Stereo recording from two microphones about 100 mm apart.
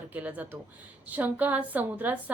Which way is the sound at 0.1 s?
15° right (ahead or behind).